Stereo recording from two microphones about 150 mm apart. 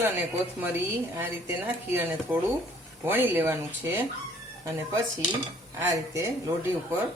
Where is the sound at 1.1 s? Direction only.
15° right (ahead or behind).